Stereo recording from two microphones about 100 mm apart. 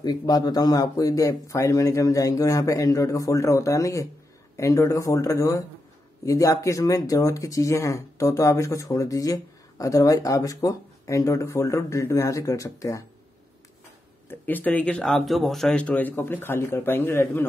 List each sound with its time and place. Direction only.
0.0 s speech: 40° left (ahead or behind)
14.4 s speech: 15° left (ahead or behind)
15.8 s a man's voice: 15° left (ahead or behind)